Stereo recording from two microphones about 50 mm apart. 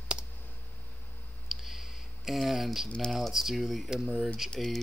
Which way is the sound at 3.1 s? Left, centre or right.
Centre.